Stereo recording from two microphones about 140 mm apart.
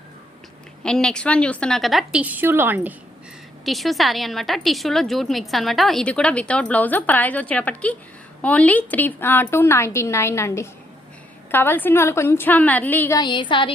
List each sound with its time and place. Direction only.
0.9 s a woman's voice: 5° left (ahead or behind); by 2.9 s 15° right (ahead or behind)
3.7 s a woman's voice: centre (ahead or behind)
13.1 s speech: 35° left (ahead or behind)